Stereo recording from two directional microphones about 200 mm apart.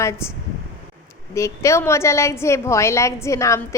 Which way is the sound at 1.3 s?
15° left (ahead or behind).